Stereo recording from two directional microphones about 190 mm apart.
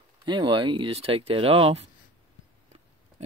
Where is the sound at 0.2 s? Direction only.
25° right (ahead or behind).